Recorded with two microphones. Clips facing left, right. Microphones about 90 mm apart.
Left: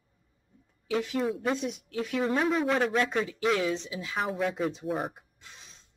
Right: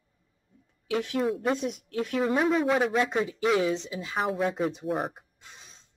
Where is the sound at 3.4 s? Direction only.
5° right (ahead or behind).